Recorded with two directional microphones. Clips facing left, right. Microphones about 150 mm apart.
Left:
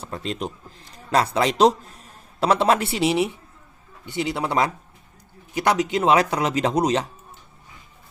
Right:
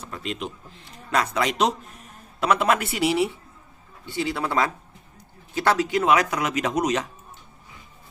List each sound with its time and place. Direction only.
0.0 s a man's voice: 35° left (ahead or behind)